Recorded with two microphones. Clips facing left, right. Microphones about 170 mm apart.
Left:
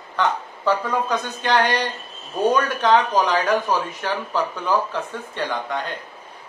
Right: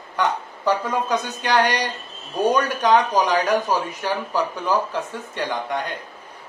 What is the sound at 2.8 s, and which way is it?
Speech, 15° right (ahead or behind).